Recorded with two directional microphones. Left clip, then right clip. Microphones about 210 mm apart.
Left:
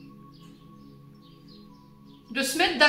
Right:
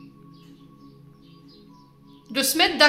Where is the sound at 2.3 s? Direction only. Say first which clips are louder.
Right 4 dB; 50° right (ahead or behind).